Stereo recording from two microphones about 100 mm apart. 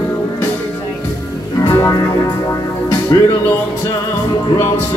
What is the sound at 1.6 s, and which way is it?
Music, 30° left (ahead or behind).